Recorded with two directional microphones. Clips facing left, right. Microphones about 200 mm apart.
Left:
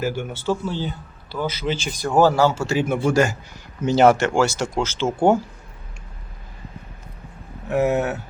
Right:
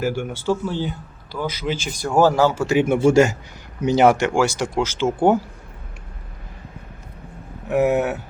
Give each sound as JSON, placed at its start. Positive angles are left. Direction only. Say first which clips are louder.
{"t": 0.0, "sound": "a man's voice", "louder": "right 1 dB", "side_deg": -10}
{"t": 7.7, "sound": "speech", "louder": "right 2 dB", "side_deg": -15}